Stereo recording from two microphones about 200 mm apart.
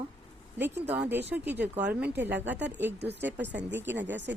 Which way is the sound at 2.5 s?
60° right (ahead or behind).